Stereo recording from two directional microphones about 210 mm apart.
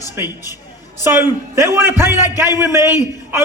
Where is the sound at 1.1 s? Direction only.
10° right (ahead or behind).